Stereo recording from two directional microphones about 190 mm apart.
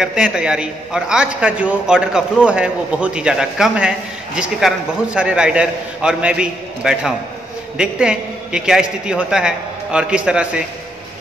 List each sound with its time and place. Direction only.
0.0 s a man's voice: 5° right (ahead or behind)